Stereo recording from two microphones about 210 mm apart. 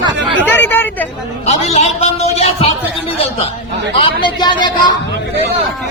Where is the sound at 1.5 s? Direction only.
30° left (ahead or behind).